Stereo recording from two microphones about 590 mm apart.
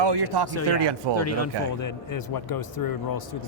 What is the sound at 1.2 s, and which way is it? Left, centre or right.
A man's voice, left.